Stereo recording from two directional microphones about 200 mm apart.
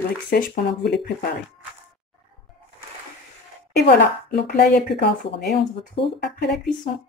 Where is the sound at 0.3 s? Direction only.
50° left (ahead or behind).